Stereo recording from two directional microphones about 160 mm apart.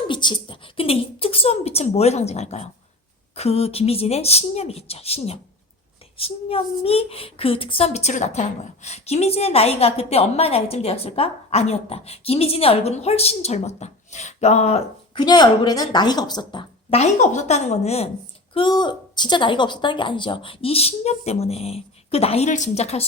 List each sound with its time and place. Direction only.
0.1 s speech: 30° left (ahead or behind)
15.2 s a woman's voice: 25° left (ahead or behind)
17.0 s a woman's voice: 45° left (ahead or behind)
18.5 s speech: 30° left (ahead or behind)